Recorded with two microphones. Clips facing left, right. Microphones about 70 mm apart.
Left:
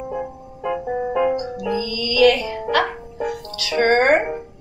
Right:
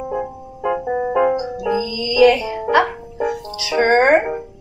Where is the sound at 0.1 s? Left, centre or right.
Right.